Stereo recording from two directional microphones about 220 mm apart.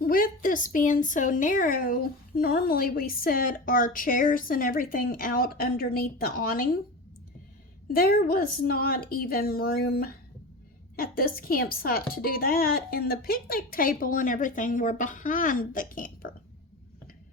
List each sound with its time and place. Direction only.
0.0 s a woman's voice: 40° left (ahead or behind)
7.9 s a woman's voice: 40° left (ahead or behind)